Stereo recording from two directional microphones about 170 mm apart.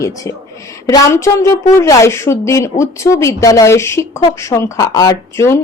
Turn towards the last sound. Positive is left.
turn(degrees=15)  # may be behind; listen again after turning